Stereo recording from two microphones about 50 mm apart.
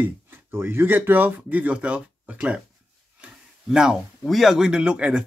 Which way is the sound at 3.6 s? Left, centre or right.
Centre.